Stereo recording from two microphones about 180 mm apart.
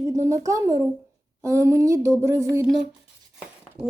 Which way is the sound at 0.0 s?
15° right (ahead or behind).